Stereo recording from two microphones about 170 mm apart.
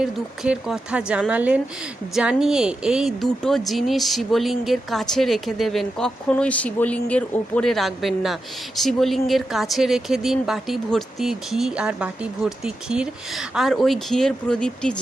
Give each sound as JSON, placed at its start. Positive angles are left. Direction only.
{"t": 0.0, "sound": "speech", "side_deg": -5}